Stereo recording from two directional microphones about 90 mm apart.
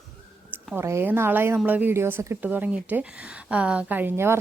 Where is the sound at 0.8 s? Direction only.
30° right (ahead or behind).